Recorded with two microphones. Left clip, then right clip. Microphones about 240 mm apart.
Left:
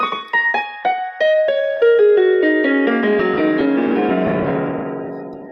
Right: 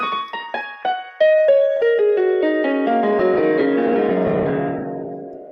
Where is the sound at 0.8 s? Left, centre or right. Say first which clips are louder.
Right 2 dB; left.